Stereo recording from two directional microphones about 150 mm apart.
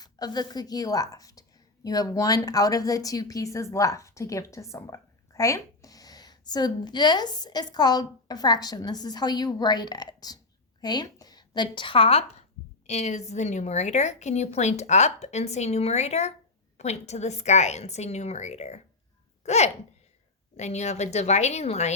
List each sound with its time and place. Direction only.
0.0 s a woman's voice: 25° left (ahead or behind); by 21.9 s 45° left (ahead or behind)